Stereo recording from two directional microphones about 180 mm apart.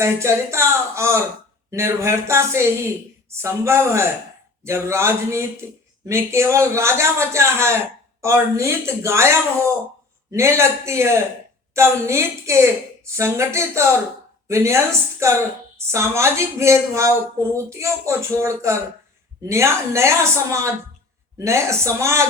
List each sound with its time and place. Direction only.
0.0 s a woman's voice: 15° right (ahead or behind)
10.3 s a woman's voice: 15° right (ahead or behind)